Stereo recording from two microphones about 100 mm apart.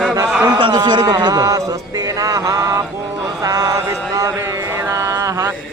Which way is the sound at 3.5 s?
35° right (ahead or behind).